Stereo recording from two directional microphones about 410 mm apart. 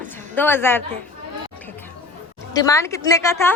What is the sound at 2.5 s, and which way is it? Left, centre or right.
A woman's voice, centre.